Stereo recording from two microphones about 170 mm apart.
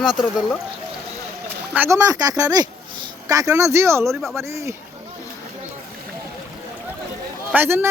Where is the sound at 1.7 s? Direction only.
15° right (ahead or behind).